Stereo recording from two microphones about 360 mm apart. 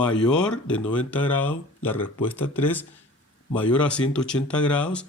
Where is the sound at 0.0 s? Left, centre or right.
Centre.